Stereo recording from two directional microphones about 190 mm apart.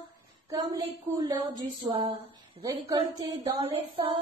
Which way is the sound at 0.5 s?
20° right (ahead or behind).